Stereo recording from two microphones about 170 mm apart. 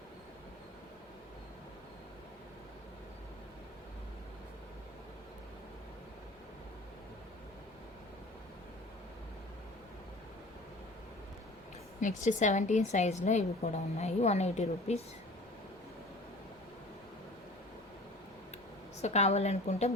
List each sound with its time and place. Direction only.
11.9 s a woman's voice: 45° left (ahead or behind)
19.0 s a woman's voice: 40° left (ahead or behind)